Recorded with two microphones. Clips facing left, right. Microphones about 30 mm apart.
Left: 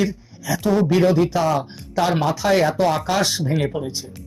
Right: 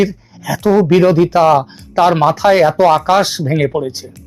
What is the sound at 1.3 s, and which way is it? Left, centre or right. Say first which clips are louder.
Speech: right 10 dB; right.